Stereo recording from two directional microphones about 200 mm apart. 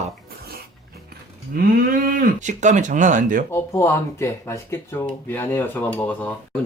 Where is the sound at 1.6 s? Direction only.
45° right (ahead or behind).